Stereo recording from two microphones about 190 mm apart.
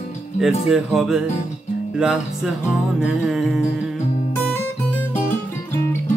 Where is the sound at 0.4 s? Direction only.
Centre (ahead or behind).